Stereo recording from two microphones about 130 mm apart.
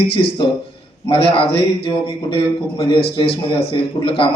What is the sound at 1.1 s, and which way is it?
A man's voice, 45° left (ahead or behind).